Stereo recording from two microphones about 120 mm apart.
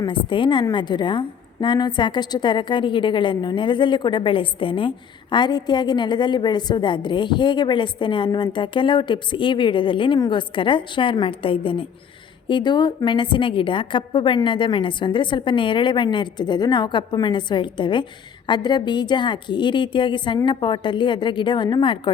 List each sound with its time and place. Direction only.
0.1 s a woman's voice: 45° left (ahead or behind)